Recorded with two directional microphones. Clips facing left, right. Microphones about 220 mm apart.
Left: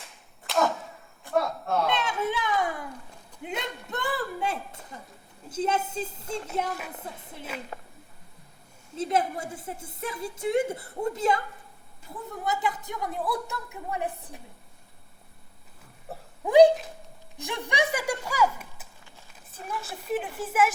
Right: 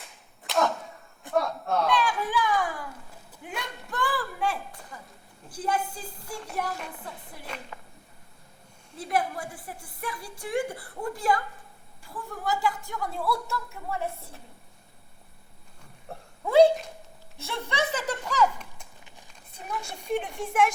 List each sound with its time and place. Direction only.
0.0 s arrow: centre (ahead or behind)
1.9 s a sound: 25° left (ahead or behind)
5.5 s a woman's voice: 25° left (ahead or behind)
7.5 s a woman's voice: 5° left (ahead or behind)
9.0 s a woman's voice: 25° left (ahead or behind)
16.4 s a sound: 15° left (ahead or behind)
17.3 s speech: 15° left (ahead or behind)
19.5 s a sound: 5° left (ahead or behind)
19.8 s a woman's voice: 5° left (ahead or behind)